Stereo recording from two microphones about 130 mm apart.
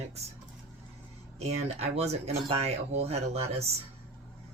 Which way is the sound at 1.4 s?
55° right (ahead or behind).